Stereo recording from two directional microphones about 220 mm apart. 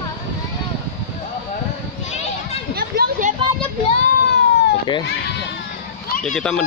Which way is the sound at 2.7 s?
45° right (ahead or behind).